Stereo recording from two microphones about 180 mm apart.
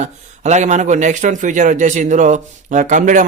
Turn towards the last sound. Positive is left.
turn(degrees=-45)  # may be behind; listen again after turning